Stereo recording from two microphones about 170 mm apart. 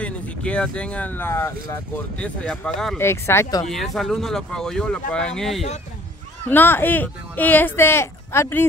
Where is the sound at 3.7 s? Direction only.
Centre (ahead or behind).